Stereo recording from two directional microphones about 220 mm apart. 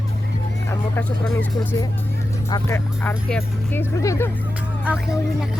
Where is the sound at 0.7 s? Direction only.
10° left (ahead or behind).